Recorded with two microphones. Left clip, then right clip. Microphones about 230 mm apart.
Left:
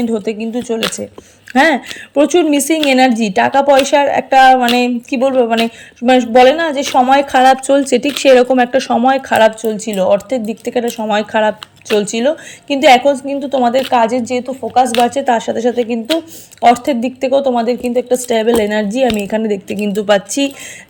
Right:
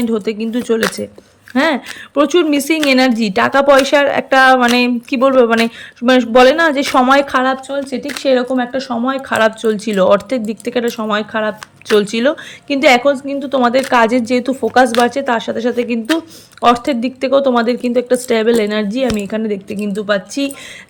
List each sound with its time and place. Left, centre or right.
0.0 s a woman's voice: centre
1.5 s a woman's voice: centre
7.7 s a woman's voice: centre
15.0 s a woman's voice: centre